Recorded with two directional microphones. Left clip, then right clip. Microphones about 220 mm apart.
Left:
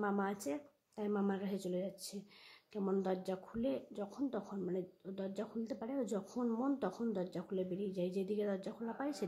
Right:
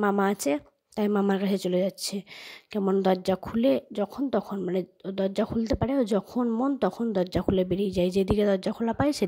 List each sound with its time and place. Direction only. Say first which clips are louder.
0.0 s speech: right 14 dB; 40° right (ahead or behind)